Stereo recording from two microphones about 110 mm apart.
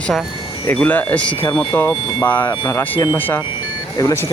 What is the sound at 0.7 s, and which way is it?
Speech, 15° left (ahead or behind).